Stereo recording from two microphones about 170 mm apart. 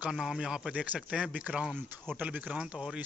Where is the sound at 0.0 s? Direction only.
5° right (ahead or behind).